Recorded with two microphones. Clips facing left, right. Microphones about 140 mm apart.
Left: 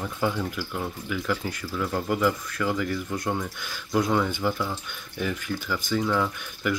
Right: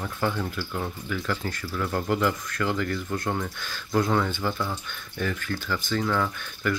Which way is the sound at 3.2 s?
5° right (ahead or behind).